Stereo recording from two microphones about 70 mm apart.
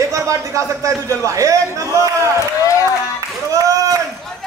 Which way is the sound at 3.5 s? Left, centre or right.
Right.